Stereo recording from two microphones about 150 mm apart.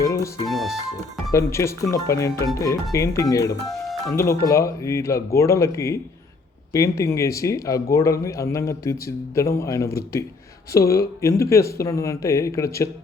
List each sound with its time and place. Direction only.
0.0 s speech: 20° left (ahead or behind)
0.4 s speech: centre (ahead or behind)
1.3 s speech: 20° left (ahead or behind)